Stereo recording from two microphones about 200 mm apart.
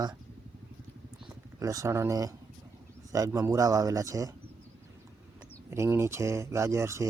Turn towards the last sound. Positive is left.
turn(degrees=-15)  # may be behind; listen again after turning